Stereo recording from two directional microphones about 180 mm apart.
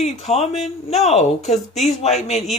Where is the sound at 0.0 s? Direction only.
35° left (ahead or behind).